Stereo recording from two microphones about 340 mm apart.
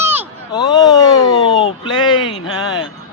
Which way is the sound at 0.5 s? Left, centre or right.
Centre.